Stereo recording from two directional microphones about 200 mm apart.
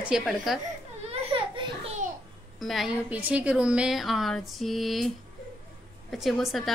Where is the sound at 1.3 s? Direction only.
25° right (ahead or behind).